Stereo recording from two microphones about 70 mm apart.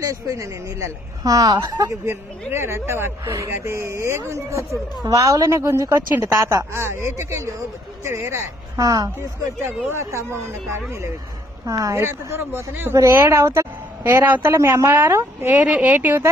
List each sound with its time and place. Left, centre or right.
0.0 s a woman's voice: right
2.0 s speech: right
5.6 s a woman's voice: right
9.7 s speech: right
12.9 s speech: right
15.6 s speech: centre